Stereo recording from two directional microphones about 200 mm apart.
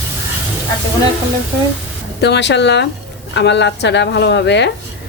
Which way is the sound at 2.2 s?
60° left (ahead or behind).